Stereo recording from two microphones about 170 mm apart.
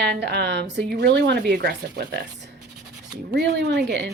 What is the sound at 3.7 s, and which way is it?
Speech, 80° right.